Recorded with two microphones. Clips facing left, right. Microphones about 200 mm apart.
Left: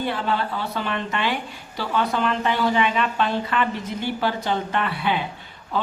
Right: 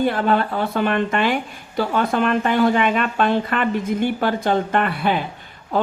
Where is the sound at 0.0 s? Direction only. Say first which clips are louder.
Right 6 dB; 50° right (ahead or behind).